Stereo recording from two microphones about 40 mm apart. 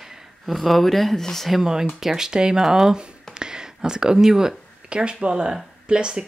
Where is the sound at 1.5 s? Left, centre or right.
Centre.